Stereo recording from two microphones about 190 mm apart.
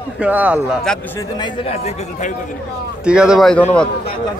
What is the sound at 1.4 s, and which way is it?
Speech, 35° left (ahead or behind).